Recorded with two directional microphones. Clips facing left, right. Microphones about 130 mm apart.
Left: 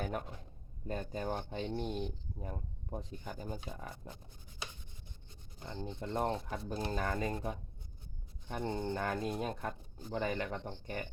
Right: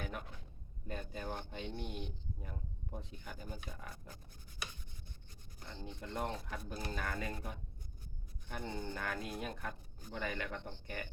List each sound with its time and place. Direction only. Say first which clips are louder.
0.0 s speech: left 6 dB; 40° left (ahead or behind); by 4.2 s 25° left (ahead or behind)
5.3 s rub: left 6 dB; 25° left (ahead or behind)
5.8 s speech: left 5 dB; 30° left (ahead or behind)
8.7 s speech: left 6 dB; 25° left (ahead or behind)